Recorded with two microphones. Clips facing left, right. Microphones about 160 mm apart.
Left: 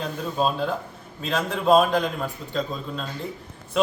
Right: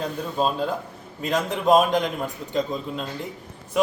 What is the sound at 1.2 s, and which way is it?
A man's voice, 15° right (ahead or behind).